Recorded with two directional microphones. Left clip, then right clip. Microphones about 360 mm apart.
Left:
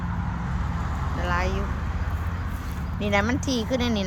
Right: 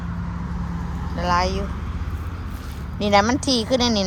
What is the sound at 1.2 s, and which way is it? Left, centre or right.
Speech, centre.